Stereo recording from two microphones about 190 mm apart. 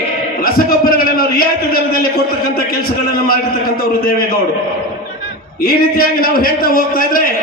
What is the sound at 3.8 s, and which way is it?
Speech, 55° left (ahead or behind).